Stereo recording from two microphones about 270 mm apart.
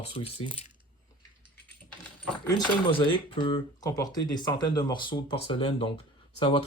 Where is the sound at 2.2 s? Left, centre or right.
Centre.